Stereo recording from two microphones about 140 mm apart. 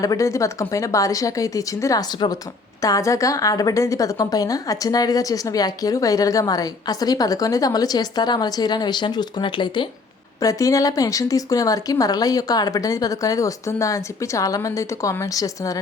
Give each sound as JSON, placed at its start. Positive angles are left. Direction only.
{"t": 0.0, "sound": "a woman's voice", "side_deg": 25}
{"t": 10.4, "sound": "a woman's voice", "side_deg": 25}